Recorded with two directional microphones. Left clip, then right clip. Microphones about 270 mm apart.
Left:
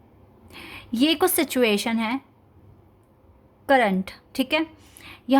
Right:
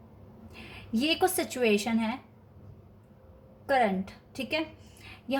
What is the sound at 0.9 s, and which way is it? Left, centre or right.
A woman's voice, left.